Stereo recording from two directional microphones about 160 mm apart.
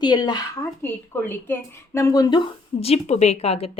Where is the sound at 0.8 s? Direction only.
15° left (ahead or behind).